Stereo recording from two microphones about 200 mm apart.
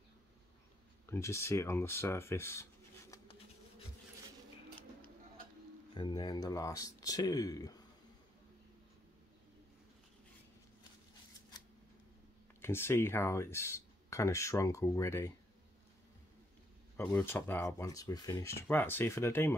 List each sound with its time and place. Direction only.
1.0 s speech: 15° left (ahead or behind)
5.9 s speech: 20° left (ahead or behind)
12.6 s speech: 10° left (ahead or behind)
16.9 s speech: 10° left (ahead or behind)